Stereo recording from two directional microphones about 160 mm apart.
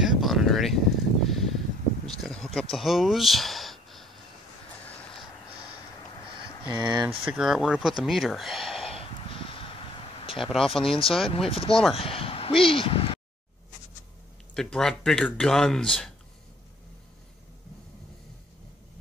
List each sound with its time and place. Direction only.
0.0 s a sound: centre (ahead or behind)
2.7 s speech: centre (ahead or behind)
6.4 s speech: 30° right (ahead or behind)
7.2 s speech: 5° right (ahead or behind)
8.8 s snort: 35° left (ahead or behind)
10.2 s a sound: 35° left (ahead or behind)
10.8 s speech: 5° left (ahead or behind)
11.2 s speech: 35° left (ahead or behind)
11.9 s a sound: 35° left (ahead or behind)
12.6 s speech: 35° left (ahead or behind)
14.5 s speech: 5° left (ahead or behind)